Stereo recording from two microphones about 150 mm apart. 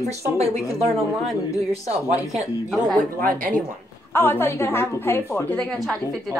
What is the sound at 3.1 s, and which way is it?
Speech, 65° right (ahead or behind).